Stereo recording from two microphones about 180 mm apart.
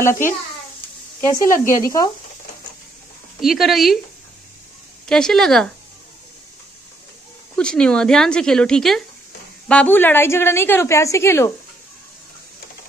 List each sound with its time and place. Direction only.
0.0 s a woman's voice: 15° left (ahead or behind)
1.5 s speech: 50° left (ahead or behind)
1.8 s speech: 20° left (ahead or behind)
3.3 s a woman's voice: centre (ahead or behind)
5.0 s a woman's voice: 5° left (ahead or behind)
7.5 s a woman's voice: 5° left (ahead or behind)